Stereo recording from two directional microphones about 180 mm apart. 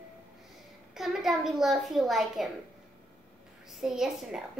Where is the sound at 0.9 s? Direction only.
Centre (ahead or behind).